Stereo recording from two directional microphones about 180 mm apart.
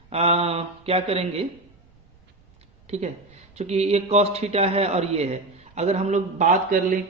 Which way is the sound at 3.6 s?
35° right (ahead or behind).